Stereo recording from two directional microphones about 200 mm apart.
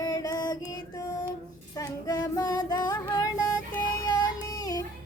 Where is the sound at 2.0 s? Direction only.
20° left (ahead or behind).